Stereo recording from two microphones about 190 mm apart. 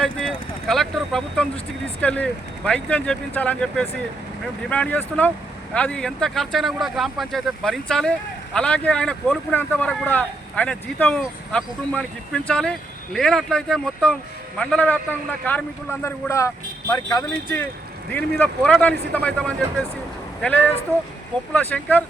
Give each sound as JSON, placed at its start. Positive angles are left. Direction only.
{"t": 0.0, "sound": "speech", "side_deg": 0}
{"t": 18.1, "sound": "speech", "side_deg": 5}